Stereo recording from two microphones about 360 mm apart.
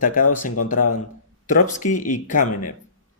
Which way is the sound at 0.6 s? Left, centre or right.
Left.